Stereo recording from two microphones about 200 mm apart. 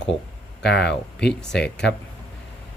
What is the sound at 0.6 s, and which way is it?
Speech, 55° left (ahead or behind).